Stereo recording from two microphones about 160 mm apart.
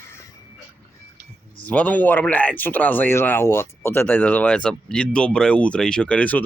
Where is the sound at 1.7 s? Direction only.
10° left (ahead or behind).